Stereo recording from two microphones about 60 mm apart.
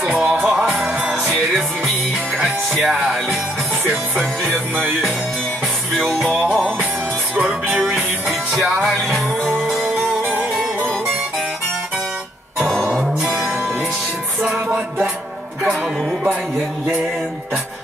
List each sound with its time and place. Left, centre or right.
0.0 s music: right
0.4 s music: centre
2.7 s music: centre
6.3 s music: centre
7.7 s music: centre
8.8 s music: centre
12.6 s music: centre